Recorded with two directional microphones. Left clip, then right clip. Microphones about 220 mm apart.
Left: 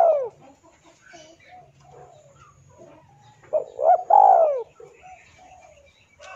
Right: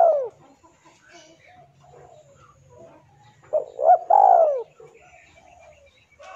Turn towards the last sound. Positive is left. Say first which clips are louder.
# even
turn(degrees=-5)  # may be behind; listen again after turning